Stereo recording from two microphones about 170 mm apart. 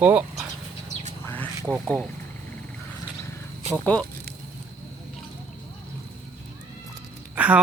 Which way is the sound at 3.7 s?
10° left (ahead or behind).